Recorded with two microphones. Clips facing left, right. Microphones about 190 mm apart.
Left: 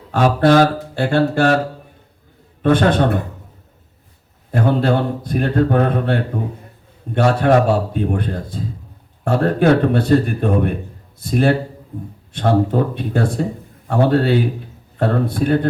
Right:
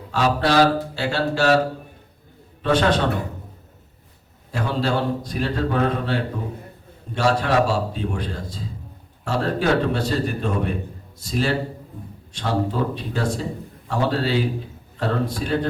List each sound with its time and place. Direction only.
0.1 s speech: 50° left (ahead or behind)
2.6 s a man's voice: 55° left (ahead or behind)
4.5 s a man's voice: 55° left (ahead or behind)